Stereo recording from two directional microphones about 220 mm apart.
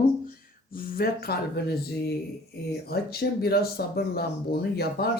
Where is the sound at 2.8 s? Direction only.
45° left (ahead or behind).